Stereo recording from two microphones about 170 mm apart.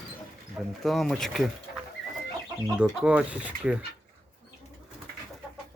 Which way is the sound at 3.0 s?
5° right (ahead or behind).